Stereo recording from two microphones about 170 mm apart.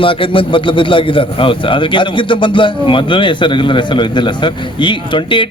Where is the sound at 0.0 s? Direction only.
30° left (ahead or behind).